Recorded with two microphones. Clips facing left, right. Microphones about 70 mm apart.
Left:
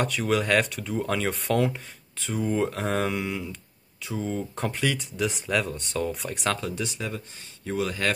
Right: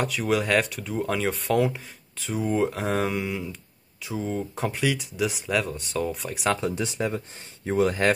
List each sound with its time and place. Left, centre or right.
0.0 s speech: centre
6.6 s speech: right